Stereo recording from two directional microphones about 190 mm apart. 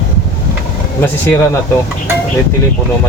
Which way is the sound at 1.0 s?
10° left (ahead or behind).